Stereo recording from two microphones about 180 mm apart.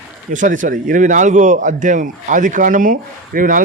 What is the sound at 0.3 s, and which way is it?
A man's voice, 45° right (ahead or behind).